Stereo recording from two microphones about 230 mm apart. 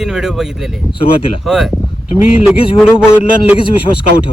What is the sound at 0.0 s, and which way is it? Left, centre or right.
Speech, centre.